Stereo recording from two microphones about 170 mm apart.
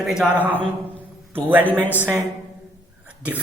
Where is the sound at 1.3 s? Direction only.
10° right (ahead or behind).